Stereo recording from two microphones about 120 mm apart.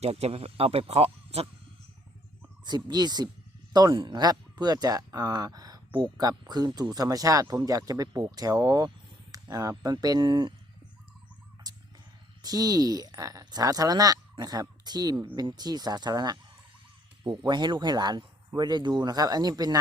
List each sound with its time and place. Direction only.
0.0 s speech: 60° right (ahead or behind)
2.6 s speech: 35° right (ahead or behind)
11.6 s a sound: 30° right (ahead or behind)
12.4 s speech: 30° right (ahead or behind)